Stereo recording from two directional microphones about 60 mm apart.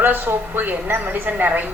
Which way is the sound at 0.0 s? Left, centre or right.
Right.